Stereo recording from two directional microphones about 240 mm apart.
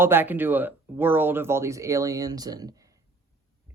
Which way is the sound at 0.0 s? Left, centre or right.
Centre.